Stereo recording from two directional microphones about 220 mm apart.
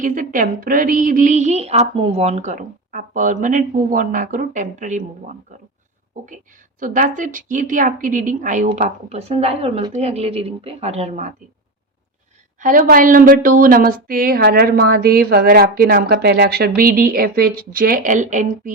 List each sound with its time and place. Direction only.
0.0 s a woman's voice: 35° right (ahead or behind)
6.2 s a woman's voice: 35° right (ahead or behind)
12.5 s a woman's voice: 35° right (ahead or behind)